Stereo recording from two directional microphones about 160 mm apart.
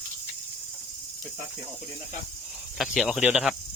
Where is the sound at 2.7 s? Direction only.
5° right (ahead or behind).